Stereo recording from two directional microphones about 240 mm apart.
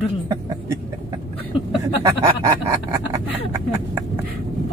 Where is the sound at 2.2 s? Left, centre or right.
Centre.